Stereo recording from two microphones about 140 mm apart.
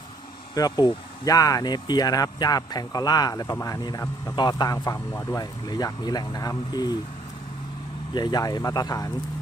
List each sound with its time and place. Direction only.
0.5 s speech: 30° left (ahead or behind)
8.1 s speech: 30° left (ahead or behind)